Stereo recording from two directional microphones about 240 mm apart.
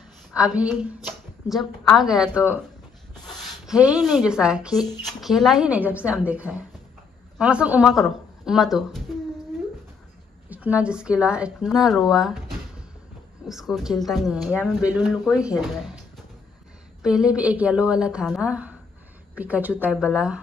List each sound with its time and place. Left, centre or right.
0.3 s a woman's voice: centre
10.5 s a woman's voice: centre
15.8 s a sound: centre
17.0 s speech: centre